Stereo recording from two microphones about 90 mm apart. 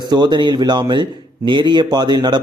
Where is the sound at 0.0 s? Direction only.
55° right (ahead or behind).